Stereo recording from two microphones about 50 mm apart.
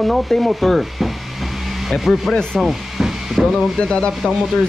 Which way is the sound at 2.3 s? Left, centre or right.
Centre.